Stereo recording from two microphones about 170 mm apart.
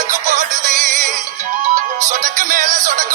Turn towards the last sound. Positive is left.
turn(degrees=-50)  # may be behind; listen again after turning